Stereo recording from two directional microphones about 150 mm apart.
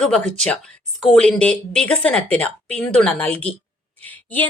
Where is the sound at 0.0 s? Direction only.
5° left (ahead or behind).